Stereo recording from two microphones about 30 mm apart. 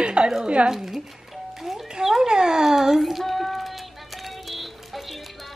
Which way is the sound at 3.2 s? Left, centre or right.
Centre.